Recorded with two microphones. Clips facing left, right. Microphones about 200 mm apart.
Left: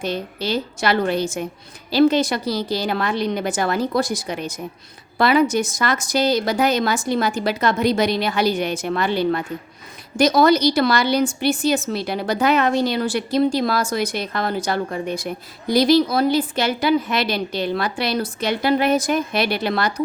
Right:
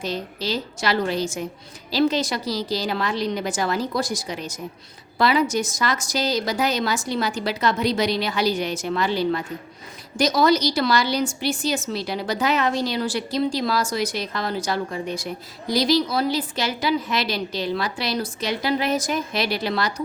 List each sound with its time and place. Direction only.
0.0 s a woman's voice: 55° left (ahead or behind)